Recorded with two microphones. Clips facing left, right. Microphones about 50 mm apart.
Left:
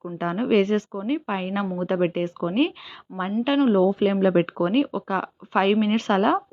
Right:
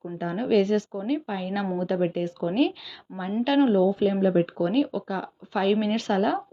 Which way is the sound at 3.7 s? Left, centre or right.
Left.